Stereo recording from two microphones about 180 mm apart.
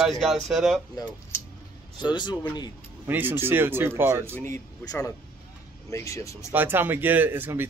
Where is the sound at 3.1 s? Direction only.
10° right (ahead or behind).